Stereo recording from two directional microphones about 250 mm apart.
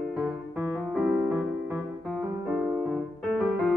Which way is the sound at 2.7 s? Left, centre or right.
Centre.